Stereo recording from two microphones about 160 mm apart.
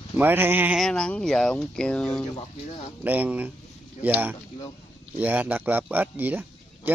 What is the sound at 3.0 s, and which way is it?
Speech, 10° right (ahead or behind).